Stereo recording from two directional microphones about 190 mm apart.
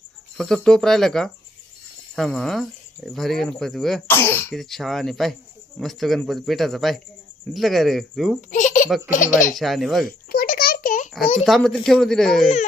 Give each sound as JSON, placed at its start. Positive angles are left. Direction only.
{"t": 0.3, "sound": "speech", "side_deg": 0}
{"t": 4.5, "sound": "speech", "side_deg": 0}
{"t": 8.4, "sound": "baby laughter", "side_deg": 40}
{"t": 9.0, "sound": "speech", "side_deg": 40}
{"t": 9.6, "sound": "speech", "side_deg": 0}
{"t": 10.2, "sound": "a sound", "side_deg": 50}
{"t": 11.4, "sound": "speech", "side_deg": 0}